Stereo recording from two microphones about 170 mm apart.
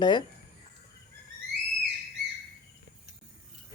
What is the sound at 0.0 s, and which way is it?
Speech, 25° left (ahead or behind).